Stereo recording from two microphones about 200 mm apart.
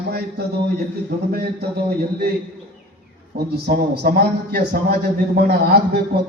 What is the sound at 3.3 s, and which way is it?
A man's voice, 50° right (ahead or behind).